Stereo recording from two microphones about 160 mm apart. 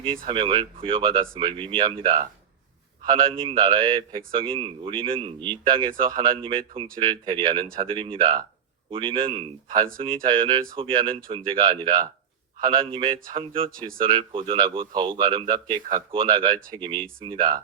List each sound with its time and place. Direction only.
0.3 s speech: 30° right (ahead or behind)
9.6 s speech: 60° right (ahead or behind)
10.2 s speech: 30° right (ahead or behind)
13.7 s speech: 60° right (ahead or behind)
14.0 s speech: 35° right (ahead or behind)